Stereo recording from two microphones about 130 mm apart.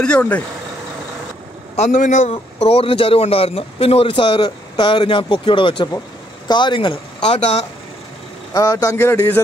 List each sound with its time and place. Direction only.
0.0 s speech: 10° left (ahead or behind)
1.8 s a man's voice: 65° left (ahead or behind)
2.6 s a man's voice: 50° left (ahead or behind)
8.5 s speech: 25° left (ahead or behind)